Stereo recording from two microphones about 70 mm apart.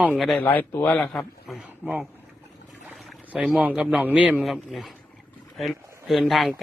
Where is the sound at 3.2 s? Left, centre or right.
Right.